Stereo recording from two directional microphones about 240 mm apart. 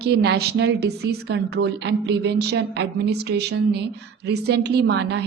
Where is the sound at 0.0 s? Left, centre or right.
Right.